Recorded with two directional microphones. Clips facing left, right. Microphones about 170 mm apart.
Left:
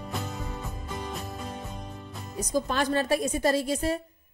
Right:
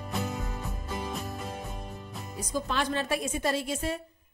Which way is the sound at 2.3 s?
45° left (ahead or behind).